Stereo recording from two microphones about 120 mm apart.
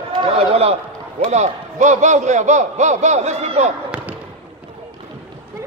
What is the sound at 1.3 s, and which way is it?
A man's voice, 80° right.